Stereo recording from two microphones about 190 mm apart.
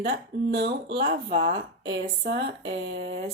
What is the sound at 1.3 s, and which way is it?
Speech, 25° right (ahead or behind).